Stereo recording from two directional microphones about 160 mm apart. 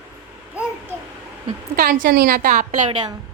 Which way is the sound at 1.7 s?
65° right (ahead or behind).